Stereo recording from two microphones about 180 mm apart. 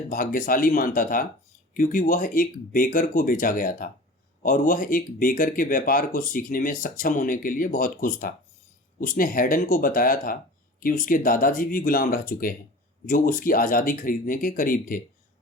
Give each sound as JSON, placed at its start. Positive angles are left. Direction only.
{"t": 0.1, "sound": "speech", "side_deg": 50}